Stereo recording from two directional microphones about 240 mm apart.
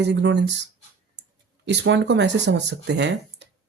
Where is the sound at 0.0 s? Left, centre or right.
Right.